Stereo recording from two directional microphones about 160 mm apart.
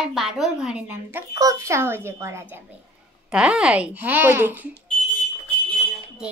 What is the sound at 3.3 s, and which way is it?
Speech, 5° right (ahead or behind).